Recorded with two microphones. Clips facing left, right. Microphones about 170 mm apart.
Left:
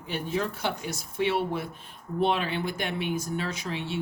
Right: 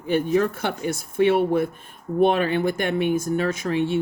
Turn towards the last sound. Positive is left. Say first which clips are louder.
# right 10 dB
turn(degrees=-50)  # may be behind; listen again after turning